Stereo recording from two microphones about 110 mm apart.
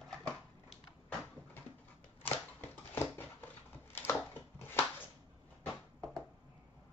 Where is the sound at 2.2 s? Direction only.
20° left (ahead or behind).